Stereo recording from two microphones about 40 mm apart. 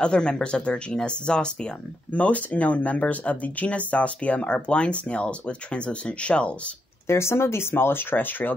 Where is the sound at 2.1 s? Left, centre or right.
Left.